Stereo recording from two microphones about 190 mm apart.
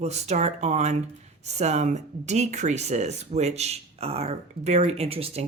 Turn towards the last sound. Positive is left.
turn(degrees=-30)  # may be behind; listen again after turning